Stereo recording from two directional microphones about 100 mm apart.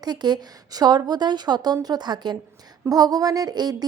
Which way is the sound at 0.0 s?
45° right (ahead or behind).